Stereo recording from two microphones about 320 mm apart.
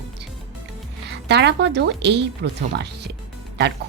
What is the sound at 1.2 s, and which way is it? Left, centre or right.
Speech, right.